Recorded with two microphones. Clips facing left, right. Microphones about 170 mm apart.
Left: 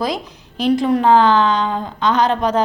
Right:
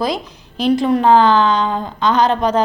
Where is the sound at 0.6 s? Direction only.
30° right (ahead or behind).